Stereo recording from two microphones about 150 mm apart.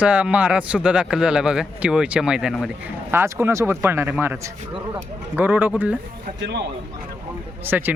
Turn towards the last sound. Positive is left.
turn(degrees=-15)  # may be behind; listen again after turning